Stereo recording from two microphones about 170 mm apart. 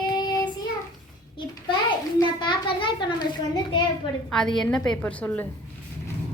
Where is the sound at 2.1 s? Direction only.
25° left (ahead or behind).